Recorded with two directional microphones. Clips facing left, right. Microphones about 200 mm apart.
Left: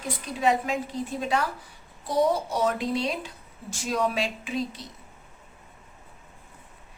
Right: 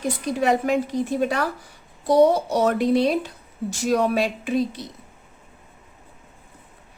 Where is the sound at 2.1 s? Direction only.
70° right (ahead or behind).